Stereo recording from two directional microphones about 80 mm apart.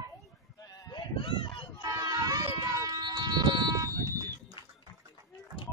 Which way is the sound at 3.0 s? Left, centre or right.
Right.